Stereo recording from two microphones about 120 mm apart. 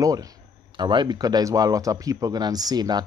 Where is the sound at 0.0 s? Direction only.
30° right (ahead or behind).